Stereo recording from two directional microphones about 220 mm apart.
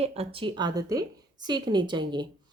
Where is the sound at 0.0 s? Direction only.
30° right (ahead or behind).